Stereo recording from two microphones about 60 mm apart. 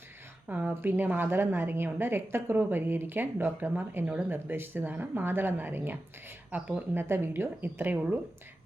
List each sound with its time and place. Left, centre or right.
0.4 s a woman's voice: right
6.9 s a woman's voice: right